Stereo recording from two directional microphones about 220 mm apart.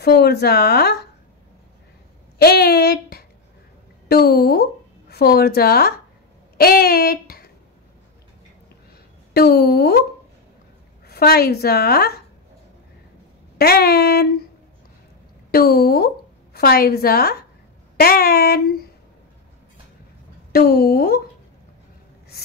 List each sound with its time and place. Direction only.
0.0 s a woman's voice: 45° left (ahead or behind)
2.3 s a sound: 45° left (ahead or behind)
4.1 s a woman's voice: 45° left (ahead or behind)
9.3 s a woman's voice: 45° left (ahead or behind)
11.1 s a woman's voice: 45° left (ahead or behind)
13.6 s a woman's voice: 45° left (ahead or behind)
15.5 s a woman's voice: 45° left (ahead or behind)
20.5 s a woman's voice: 45° left (ahead or behind)